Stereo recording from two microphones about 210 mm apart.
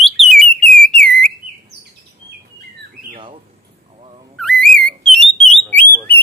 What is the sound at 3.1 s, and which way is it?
Squawk, 25° right (ahead or behind).